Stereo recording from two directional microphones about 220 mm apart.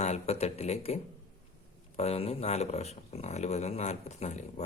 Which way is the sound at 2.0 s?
30° left (ahead or behind).